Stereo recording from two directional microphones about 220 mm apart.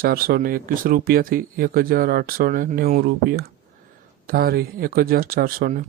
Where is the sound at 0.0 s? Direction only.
45° right (ahead or behind).